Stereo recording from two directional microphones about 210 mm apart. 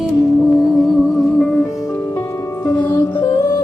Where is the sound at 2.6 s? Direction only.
20° left (ahead or behind).